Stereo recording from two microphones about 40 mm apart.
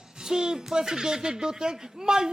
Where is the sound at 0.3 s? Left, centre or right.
Centre.